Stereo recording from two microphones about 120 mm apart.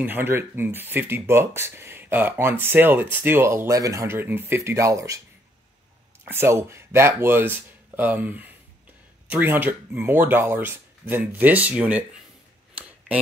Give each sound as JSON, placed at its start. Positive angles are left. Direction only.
{"t": 0.0, "sound": "speech", "side_deg": -15}
{"t": 6.2, "sound": "speech", "side_deg": -20}